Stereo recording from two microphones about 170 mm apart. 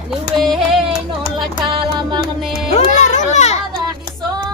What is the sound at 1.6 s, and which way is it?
Music, 25° right (ahead or behind).